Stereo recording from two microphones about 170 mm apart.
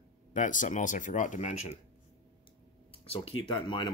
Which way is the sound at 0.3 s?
50° left (ahead or behind).